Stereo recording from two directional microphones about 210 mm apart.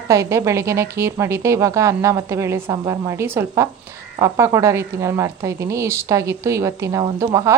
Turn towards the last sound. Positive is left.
turn(degrees=-15)  # may be behind; listen again after turning